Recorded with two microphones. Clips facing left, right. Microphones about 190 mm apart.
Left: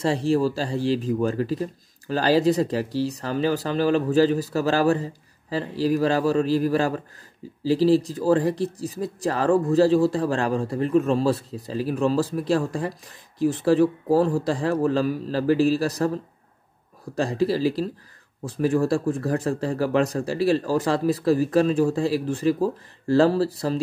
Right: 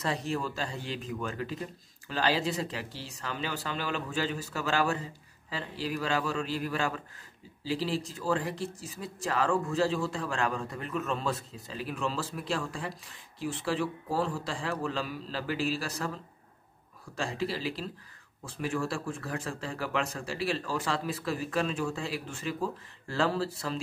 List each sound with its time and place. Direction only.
0.0 s speech: 30° left (ahead or behind)